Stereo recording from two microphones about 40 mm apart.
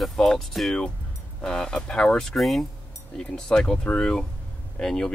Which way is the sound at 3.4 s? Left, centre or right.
Left.